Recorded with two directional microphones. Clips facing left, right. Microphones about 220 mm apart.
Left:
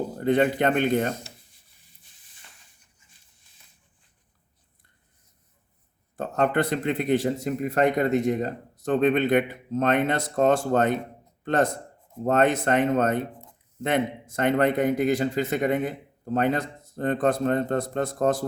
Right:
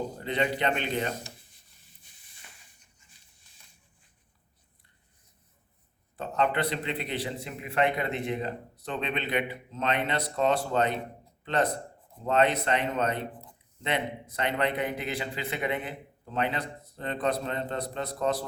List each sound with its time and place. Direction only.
0.2 s a man's voice: 50° left (ahead or behind)
6.1 s a man's voice: 45° left (ahead or behind)